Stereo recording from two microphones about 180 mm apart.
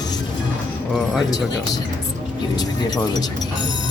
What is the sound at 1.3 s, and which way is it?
Speech, 20° left (ahead or behind).